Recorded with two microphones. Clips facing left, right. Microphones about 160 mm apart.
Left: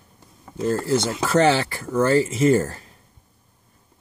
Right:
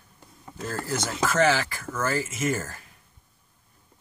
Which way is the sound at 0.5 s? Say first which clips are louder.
Left 10 dB; 25° left (ahead or behind).